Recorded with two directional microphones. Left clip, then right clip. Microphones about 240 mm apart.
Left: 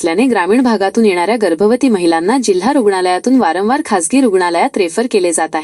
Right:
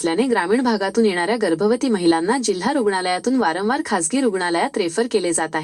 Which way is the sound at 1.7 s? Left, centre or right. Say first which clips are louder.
Left 6 dB; left.